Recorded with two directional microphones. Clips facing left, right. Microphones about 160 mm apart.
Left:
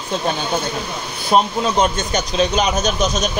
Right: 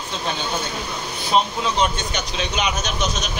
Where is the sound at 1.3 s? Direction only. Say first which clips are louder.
Left 4 dB; 45° left (ahead or behind).